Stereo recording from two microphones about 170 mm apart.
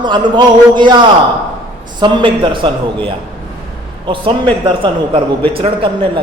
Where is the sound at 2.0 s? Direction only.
30° right (ahead or behind).